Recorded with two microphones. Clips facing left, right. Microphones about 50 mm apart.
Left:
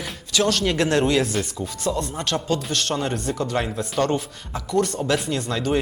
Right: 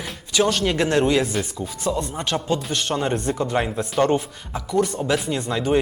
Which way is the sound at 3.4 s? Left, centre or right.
Centre.